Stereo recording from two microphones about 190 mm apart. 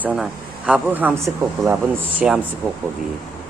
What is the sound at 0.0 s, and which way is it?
Speech, 5° right (ahead or behind).